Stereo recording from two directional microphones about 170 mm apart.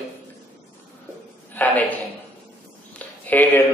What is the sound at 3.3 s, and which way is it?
Speech, 10° left (ahead or behind).